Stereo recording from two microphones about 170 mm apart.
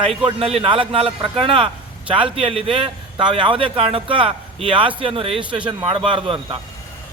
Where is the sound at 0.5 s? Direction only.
30° right (ahead or behind).